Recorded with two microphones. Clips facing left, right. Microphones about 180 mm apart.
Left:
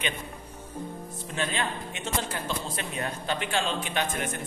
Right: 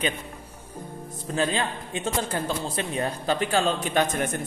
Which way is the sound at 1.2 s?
35° right (ahead or behind).